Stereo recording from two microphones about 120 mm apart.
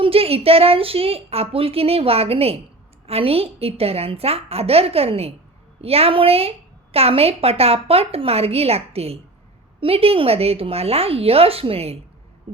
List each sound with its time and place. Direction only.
0.0 s a woman's voice: 55° right (ahead or behind)